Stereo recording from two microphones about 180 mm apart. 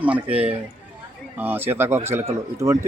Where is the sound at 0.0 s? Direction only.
10° right (ahead or behind).